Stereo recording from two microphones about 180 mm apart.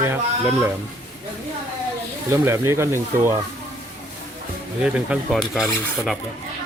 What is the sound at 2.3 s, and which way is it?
Speech, 15° right (ahead or behind).